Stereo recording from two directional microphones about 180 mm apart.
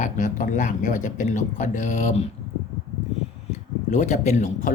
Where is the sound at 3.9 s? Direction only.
40° left (ahead or behind).